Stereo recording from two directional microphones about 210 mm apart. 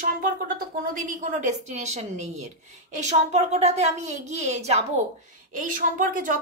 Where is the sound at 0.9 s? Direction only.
40° right (ahead or behind).